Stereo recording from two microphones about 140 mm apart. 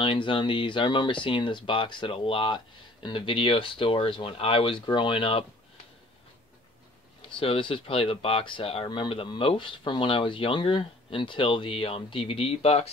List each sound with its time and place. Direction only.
0.0 s speech: 40° left (ahead or behind)
7.2 s speech: 40° left (ahead or behind)